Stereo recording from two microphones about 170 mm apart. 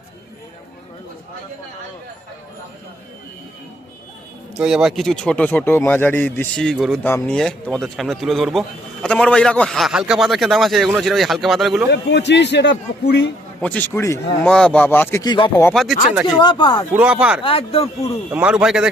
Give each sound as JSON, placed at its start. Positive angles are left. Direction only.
{"t": 4.5, "sound": "speech", "side_deg": -5}
{"t": 11.9, "sound": "a man's voice", "side_deg": 90}
{"t": 13.6, "sound": "speech", "side_deg": 10}
{"t": 14.5, "sound": "speech", "side_deg": 5}
{"t": 15.2, "sound": "speech", "side_deg": 25}
{"t": 15.7, "sound": "speech", "side_deg": 0}
{"t": 16.4, "sound": "speech", "side_deg": 25}
{"t": 16.9, "sound": "speech", "side_deg": -5}
{"t": 17.4, "sound": "speech", "side_deg": 35}
{"t": 18.3, "sound": "speech", "side_deg": -10}